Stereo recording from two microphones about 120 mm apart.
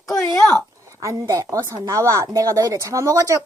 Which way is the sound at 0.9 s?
25° right (ahead or behind).